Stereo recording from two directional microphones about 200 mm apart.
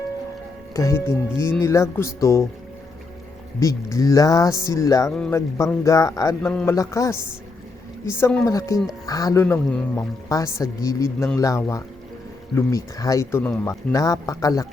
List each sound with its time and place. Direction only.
0.7 s speech: 15° left (ahead or behind)
3.6 s speech: 15° left (ahead or behind)